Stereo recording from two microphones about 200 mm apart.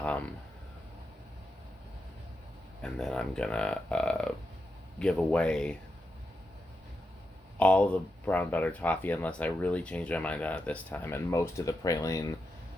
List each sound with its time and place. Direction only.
0.0 s a sound: 5° left (ahead or behind)
2.8 s speech: 5° left (ahead or behind)
7.6 s speech: 5° left (ahead or behind)